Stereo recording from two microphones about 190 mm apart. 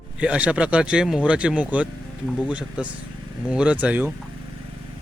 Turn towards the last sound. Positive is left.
turn(degrees=-10)  # may be behind; listen again after turning